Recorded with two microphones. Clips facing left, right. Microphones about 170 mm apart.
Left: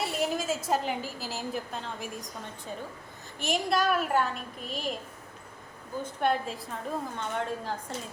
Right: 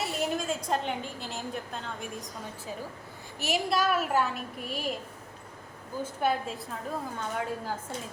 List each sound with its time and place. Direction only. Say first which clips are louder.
0.0 s a woman's voice: left 1 dB; centre (ahead or behind)
6.0 s a woman's voice: left 1 dB; 5° right (ahead or behind)